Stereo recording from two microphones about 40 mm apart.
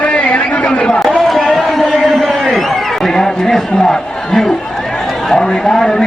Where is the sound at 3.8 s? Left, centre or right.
Centre.